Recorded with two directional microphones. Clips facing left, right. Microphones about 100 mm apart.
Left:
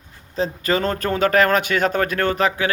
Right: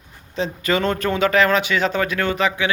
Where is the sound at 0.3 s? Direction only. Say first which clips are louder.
Even; 40° left (ahead or behind).